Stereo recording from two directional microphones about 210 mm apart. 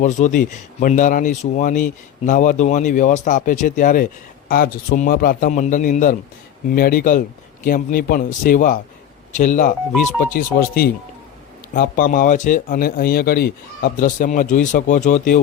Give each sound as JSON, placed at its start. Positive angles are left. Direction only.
{"t": 0.0, "sound": "speech", "side_deg": 35}